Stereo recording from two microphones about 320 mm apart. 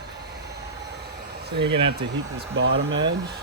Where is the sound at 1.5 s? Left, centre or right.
Right.